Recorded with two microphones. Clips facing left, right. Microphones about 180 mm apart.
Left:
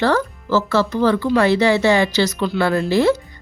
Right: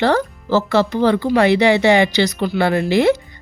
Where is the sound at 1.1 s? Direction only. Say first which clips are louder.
Right 1 dB; 60° right (ahead or behind).